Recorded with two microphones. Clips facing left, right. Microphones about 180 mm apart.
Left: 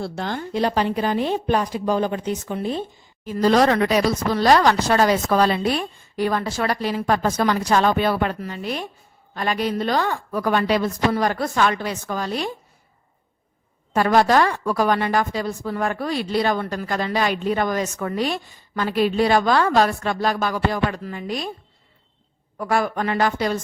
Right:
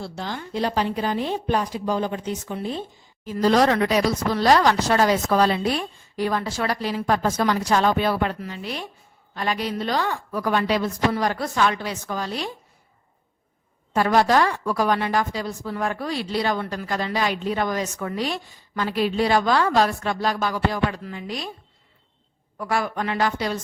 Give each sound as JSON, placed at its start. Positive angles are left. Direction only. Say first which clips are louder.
{"t": 0.0, "sound": "a woman's voice", "louder": "left 4 dB", "side_deg": 55}
{"t": 13.9, "sound": "a woman's voice", "louder": "left 2 dB", "side_deg": 55}
{"t": 22.5, "sound": "a woman's voice", "louder": "left 3 dB", "side_deg": 50}